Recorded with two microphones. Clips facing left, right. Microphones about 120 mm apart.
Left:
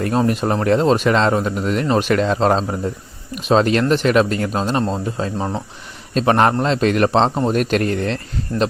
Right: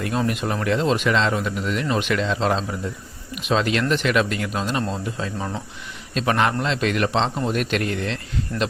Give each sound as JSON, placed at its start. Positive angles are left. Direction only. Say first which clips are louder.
{"t": 0.0, "sound": "speech", "louder": "left 6 dB", "side_deg": 40}
{"t": 6.1, "sound": "speech", "louder": "left 6 dB", "side_deg": 40}